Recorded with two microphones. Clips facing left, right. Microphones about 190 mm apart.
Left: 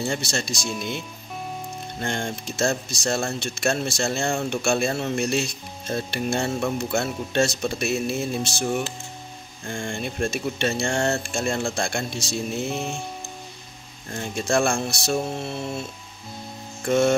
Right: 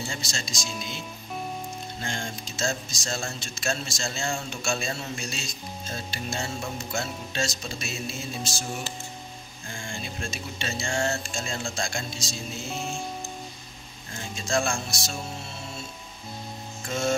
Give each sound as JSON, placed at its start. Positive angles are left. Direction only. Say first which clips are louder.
{"t": 0.1, "sound": "speech", "louder": "left 8 dB", "side_deg": 65}
{"t": 14.1, "sound": "speech", "louder": "left 5 dB", "side_deg": 60}
{"t": 16.8, "sound": "hum", "louder": "left 9 dB", "side_deg": 65}